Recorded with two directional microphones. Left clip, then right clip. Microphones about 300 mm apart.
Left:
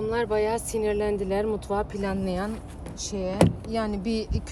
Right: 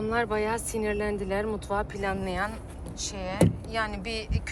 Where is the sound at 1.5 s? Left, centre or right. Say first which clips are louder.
Left 2 dB; left.